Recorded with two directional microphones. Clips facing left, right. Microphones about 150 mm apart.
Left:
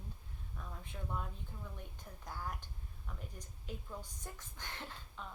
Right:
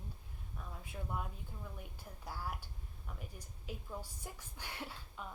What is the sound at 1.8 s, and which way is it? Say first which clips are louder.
Speech: right 1 dB; 5° right (ahead or behind).